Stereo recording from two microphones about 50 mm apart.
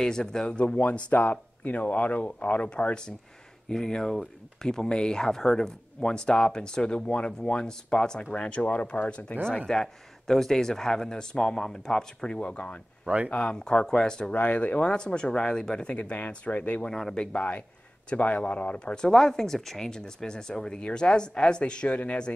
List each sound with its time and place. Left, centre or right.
0.0 s speech: centre; by 9.4 s left
9.7 s speech: centre
14.3 s speech: left
14.9 s speech: centre
16.0 s speech: left
16.8 s speech: centre
18.9 s speech: centre